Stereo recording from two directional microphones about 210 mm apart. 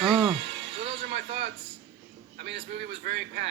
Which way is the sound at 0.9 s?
55° right (ahead or behind).